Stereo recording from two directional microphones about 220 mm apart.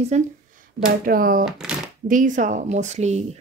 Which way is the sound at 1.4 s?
Centre (ahead or behind).